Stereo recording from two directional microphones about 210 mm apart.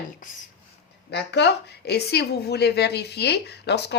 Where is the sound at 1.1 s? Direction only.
55° left (ahead or behind).